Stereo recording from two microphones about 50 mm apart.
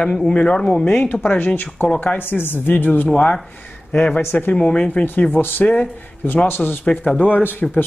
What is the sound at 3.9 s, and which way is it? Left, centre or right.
Speech, left.